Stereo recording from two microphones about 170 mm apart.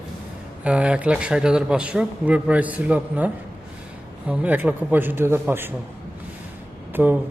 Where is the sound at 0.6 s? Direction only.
5° right (ahead or behind).